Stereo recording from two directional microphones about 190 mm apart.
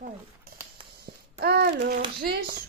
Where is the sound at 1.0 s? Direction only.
55° right (ahead or behind).